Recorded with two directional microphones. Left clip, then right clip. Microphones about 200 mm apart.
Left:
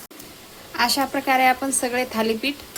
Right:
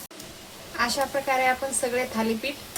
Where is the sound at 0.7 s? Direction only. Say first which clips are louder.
Left 4 dB; 50° left (ahead or behind).